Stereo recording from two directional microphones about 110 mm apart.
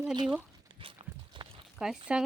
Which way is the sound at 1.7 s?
5° right (ahead or behind).